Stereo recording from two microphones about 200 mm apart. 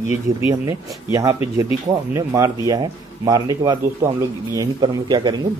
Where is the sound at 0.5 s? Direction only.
15° right (ahead or behind).